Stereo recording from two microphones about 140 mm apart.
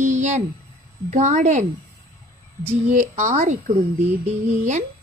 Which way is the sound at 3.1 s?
55° right (ahead or behind).